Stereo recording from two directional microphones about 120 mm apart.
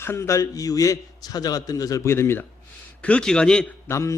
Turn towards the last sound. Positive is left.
turn(degrees=25)  # may be behind; listen again after turning